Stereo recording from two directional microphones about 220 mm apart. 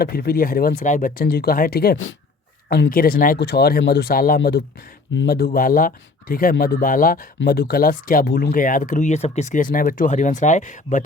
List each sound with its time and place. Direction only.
0.0 s speech: 45° left (ahead or behind)